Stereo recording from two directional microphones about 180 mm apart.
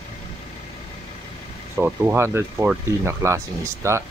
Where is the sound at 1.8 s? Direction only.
10° right (ahead or behind).